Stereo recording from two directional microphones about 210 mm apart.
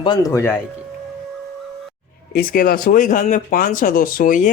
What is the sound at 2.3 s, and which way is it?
Speech, 45° left (ahead or behind).